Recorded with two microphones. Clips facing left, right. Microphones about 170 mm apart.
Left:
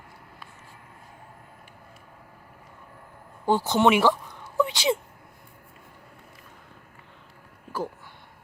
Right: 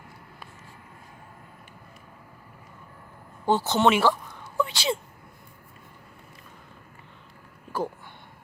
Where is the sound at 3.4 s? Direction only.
10° left (ahead or behind).